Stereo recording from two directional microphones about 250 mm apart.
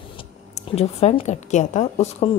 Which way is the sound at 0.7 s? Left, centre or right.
Left.